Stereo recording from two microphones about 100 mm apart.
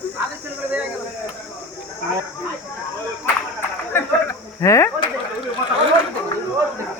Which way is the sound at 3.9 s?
20° left (ahead or behind).